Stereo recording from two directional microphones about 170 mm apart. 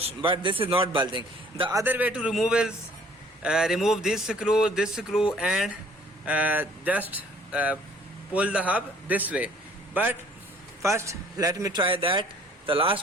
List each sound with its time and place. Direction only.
0.0 s a man's voice: 30° right (ahead or behind)
1.8 s a man's voice: 10° right (ahead or behind); by 13.0 s 30° right (ahead or behind)